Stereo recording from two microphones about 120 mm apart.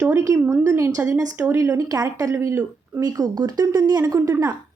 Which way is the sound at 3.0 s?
35° right (ahead or behind).